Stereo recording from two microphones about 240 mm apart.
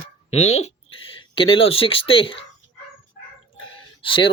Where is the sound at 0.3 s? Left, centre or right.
Left.